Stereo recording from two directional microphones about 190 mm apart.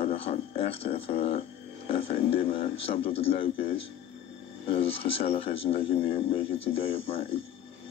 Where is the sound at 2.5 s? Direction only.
30° left (ahead or behind).